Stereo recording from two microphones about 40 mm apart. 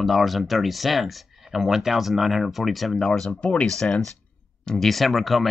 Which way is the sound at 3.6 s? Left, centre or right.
Centre.